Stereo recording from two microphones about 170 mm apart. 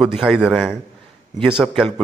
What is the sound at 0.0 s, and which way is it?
Speech, 5° right (ahead or behind).